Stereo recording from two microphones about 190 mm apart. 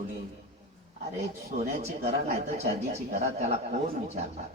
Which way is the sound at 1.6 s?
35° right (ahead or behind).